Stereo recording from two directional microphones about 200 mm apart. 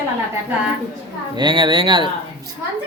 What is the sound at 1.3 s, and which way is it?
Speech, 25° right (ahead or behind).